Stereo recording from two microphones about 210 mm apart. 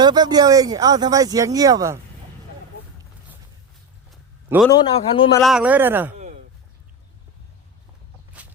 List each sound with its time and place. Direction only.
0.0 s speech: 20° right (ahead or behind)
4.5 s speech: 10° right (ahead or behind)
4.9 s a man's voice: 25° left (ahead or behind)
5.4 s speech: centre (ahead or behind)
6.1 s a sound: 30° right (ahead or behind)